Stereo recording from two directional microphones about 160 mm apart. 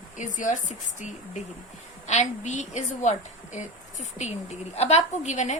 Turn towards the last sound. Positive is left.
turn(degrees=45)  # may be behind; listen again after turning